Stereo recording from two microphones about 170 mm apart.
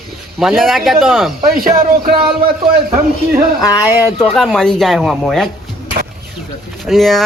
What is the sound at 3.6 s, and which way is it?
Speech, 20° left (ahead or behind).